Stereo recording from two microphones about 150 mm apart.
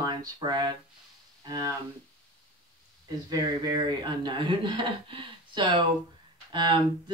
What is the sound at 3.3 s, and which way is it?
Speech, 25° right (ahead or behind).